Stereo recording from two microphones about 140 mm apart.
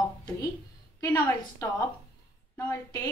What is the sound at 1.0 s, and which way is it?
Speech, 20° left (ahead or behind).